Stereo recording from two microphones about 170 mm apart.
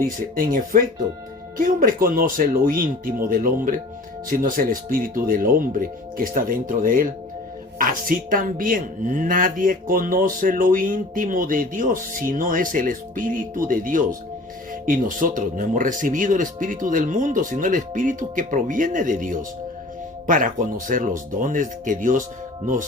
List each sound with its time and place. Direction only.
0.0 s speech: 55° right (ahead or behind)